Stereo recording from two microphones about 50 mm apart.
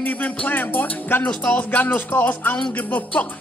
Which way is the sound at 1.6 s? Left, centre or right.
Left.